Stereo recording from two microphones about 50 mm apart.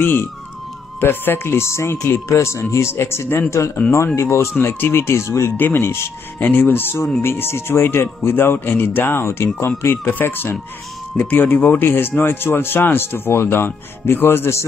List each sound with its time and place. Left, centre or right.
0.0 s speech: left
4.6 s speech: left
5.6 s speech: left
6.4 s speech: left